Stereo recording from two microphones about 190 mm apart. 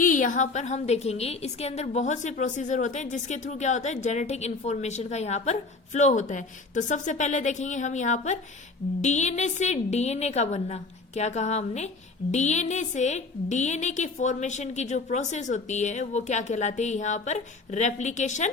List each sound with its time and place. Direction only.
0.0 s a woman's voice: 45° left (ahead or behind)